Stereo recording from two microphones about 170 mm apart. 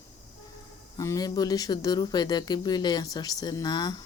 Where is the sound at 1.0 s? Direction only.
20° left (ahead or behind).